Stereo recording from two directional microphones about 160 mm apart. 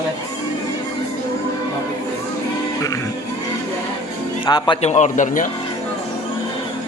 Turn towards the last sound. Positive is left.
turn(degrees=55)  # may be behind; listen again after turning